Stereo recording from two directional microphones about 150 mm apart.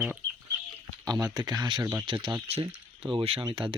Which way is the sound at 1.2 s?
25° right (ahead or behind).